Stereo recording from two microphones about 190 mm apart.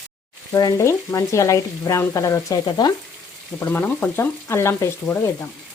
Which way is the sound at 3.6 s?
10° left (ahead or behind).